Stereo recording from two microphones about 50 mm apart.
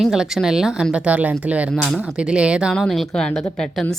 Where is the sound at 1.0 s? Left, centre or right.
Right.